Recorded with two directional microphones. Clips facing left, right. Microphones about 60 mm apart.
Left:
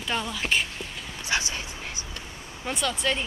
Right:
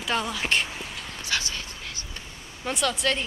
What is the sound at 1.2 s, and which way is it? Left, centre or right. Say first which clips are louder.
Dog: left 2 dB; left.